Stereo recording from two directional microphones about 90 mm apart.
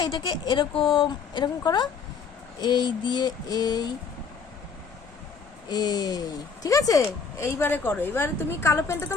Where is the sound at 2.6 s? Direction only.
55° left (ahead or behind).